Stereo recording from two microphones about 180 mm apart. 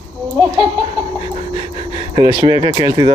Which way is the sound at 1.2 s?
30° left (ahead or behind).